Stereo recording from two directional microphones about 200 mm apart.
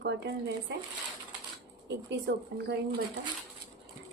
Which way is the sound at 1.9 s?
60° right (ahead or behind).